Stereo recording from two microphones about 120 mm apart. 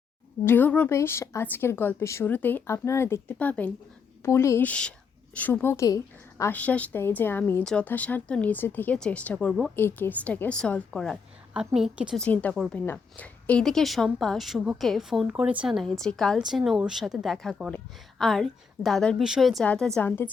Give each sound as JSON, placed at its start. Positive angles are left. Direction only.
{"t": 0.4, "sound": "speech", "side_deg": 15}
{"t": 3.3, "sound": "speech", "side_deg": 10}
{"t": 4.2, "sound": "a woman's voice", "side_deg": 20}
{"t": 6.5, "sound": "speech", "side_deg": 10}
{"t": 9.5, "sound": "a woman's voice", "side_deg": -5}
{"t": 9.7, "sound": "a woman's voice", "side_deg": 15}
{"t": 12.1, "sound": "a woman's voice", "side_deg": 10}
{"t": 15.3, "sound": "a woman's voice", "side_deg": -10}